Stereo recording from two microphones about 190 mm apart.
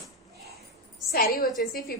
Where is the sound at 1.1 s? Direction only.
50° left (ahead or behind).